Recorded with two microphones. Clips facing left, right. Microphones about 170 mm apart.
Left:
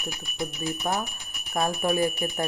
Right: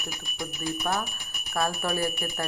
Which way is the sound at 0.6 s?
15° left (ahead or behind).